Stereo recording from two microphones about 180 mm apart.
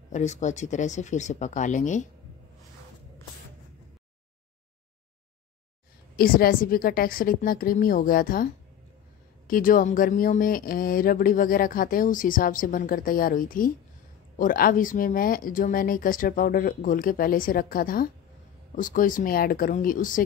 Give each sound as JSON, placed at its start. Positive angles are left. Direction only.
{"t": 0.1, "sound": "speech", "side_deg": 40}
{"t": 6.1, "sound": "speech", "side_deg": 55}
{"t": 9.5, "sound": "speech", "side_deg": 50}